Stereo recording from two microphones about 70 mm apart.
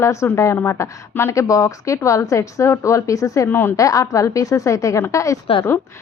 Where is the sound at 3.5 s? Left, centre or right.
Left.